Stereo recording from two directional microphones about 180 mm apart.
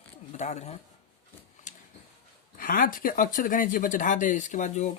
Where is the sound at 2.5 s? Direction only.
50° left (ahead or behind).